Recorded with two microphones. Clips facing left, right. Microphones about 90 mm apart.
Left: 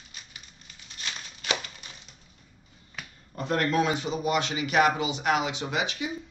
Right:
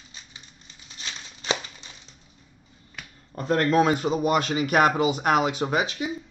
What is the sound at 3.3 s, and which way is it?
Speech, 35° right (ahead or behind).